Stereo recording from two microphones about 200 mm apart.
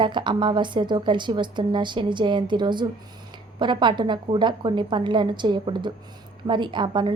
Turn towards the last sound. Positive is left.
turn(degrees=-25)  # may be behind; listen again after turning